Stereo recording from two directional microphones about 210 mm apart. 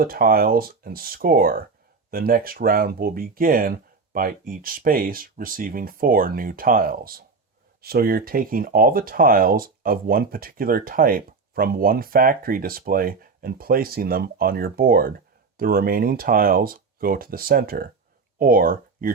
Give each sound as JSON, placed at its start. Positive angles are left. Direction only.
{"t": 0.0, "sound": "speech", "side_deg": -45}